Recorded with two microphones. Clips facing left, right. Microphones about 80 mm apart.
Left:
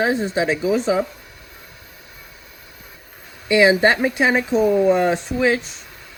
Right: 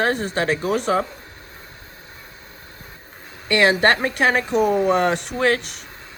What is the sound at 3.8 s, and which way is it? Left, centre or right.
Speech, right.